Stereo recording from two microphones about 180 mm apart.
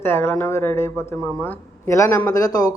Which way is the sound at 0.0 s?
10° left (ahead or behind).